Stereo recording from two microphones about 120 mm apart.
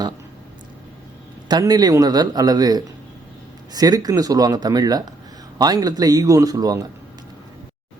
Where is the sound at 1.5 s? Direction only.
30° right (ahead or behind).